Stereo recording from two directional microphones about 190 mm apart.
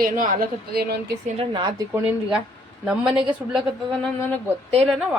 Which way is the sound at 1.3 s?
25° right (ahead or behind).